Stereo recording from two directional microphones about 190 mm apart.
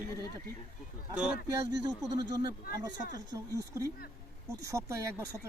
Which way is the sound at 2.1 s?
20° right (ahead or behind).